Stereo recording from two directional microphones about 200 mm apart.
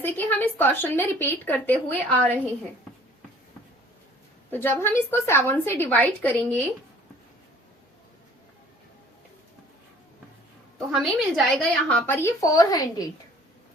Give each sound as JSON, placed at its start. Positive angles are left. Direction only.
{"t": 0.0, "sound": "speech", "side_deg": 10}
{"t": 4.5, "sound": "speech", "side_deg": 10}
{"t": 10.8, "sound": "speech", "side_deg": 0}